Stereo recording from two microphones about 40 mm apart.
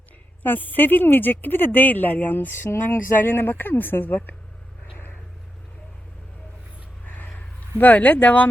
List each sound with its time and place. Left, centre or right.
0.4 s speech: left
2.5 s speech: left
7.0 s a sound: left
7.3 s a man's voice: left